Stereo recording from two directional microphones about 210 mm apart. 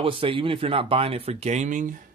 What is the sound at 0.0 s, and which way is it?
Speech, 25° right (ahead or behind).